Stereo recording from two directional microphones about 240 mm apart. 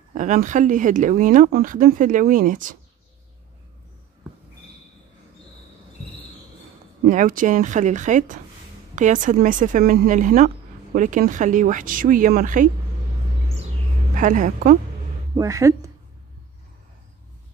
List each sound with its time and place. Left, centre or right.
0.1 s a woman's voice: right
7.1 s a woman's voice: right
14.1 s a woman's voice: right
15.3 s a woman's voice: centre